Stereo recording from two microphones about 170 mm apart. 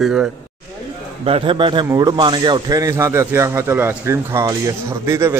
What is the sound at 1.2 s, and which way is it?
A man's voice, 30° right (ahead or behind).